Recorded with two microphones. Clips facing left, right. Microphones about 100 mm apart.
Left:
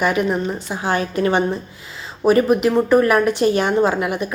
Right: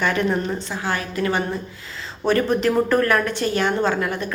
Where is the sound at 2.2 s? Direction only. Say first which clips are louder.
Left 4 dB; 10° left (ahead or behind).